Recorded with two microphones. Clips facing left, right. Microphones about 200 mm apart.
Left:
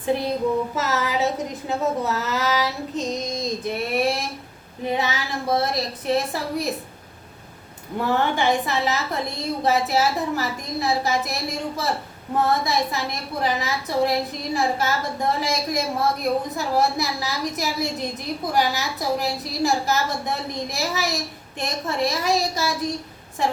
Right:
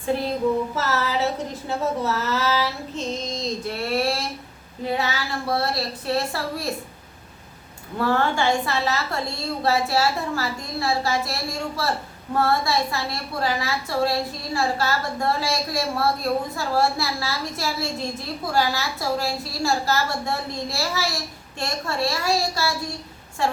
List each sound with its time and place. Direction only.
0.8 s a woman's voice: 15° left (ahead or behind)
7.9 s a woman's voice: 20° left (ahead or behind)